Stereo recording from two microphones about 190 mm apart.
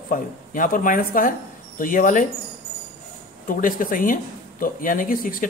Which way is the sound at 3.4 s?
45° left (ahead or behind).